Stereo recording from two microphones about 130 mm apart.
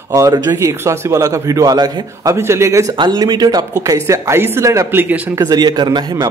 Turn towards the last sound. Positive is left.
turn(degrees=-35)  # may be behind; listen again after turning